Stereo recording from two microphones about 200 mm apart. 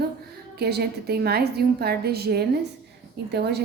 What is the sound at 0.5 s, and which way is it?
A woman's voice, 55° right (ahead or behind).